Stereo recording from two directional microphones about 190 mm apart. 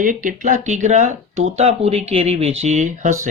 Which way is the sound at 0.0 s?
45° right (ahead or behind).